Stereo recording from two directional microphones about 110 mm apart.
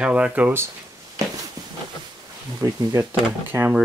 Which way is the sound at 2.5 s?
30° right (ahead or behind).